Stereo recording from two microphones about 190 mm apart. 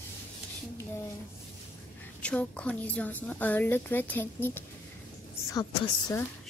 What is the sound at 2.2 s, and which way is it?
A woman's voice, 5° left (ahead or behind).